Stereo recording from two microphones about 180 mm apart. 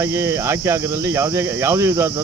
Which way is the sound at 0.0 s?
15° right (ahead or behind).